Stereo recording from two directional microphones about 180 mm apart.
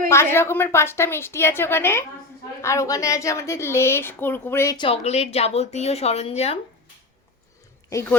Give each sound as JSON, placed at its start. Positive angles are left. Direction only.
{"t": 0.1, "sound": "a woman's voice", "side_deg": 15}
{"t": 4.8, "sound": "a woman's voice", "side_deg": 35}